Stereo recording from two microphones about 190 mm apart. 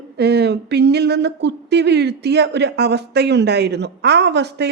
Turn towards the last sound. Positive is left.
turn(degrees=-65)  # may be behind; listen again after turning